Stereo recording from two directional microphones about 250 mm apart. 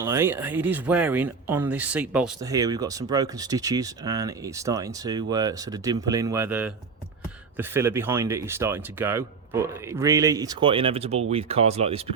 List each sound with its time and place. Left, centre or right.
0.0 s speech: centre